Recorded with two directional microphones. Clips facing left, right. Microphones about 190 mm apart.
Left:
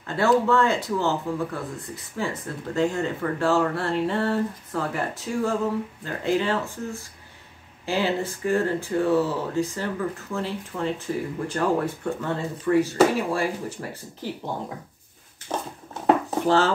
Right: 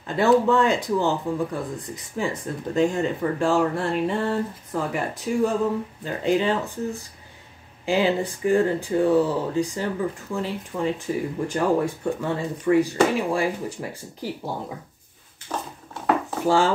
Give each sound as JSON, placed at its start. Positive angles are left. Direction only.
{"t": 0.0, "sound": "speech", "side_deg": -15}
{"t": 15.5, "sound": "a sound", "side_deg": 20}
{"t": 16.4, "sound": "speech", "side_deg": -10}